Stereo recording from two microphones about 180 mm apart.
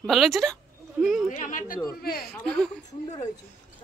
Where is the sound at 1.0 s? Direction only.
Centre (ahead or behind).